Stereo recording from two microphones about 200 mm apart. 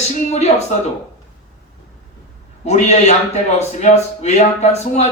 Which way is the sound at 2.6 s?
35° left (ahead or behind).